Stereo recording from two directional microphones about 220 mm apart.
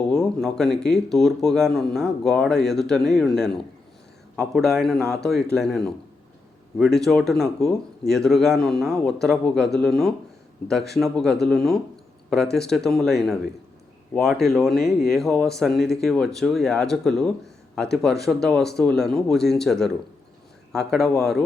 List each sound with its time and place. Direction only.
0.1 s speech: centre (ahead or behind)